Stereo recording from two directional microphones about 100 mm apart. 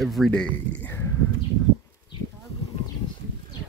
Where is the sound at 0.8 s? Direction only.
20° left (ahead or behind).